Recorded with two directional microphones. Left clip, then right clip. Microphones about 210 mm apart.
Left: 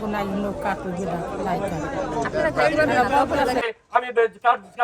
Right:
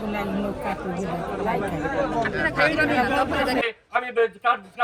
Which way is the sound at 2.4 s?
50° left (ahead or behind).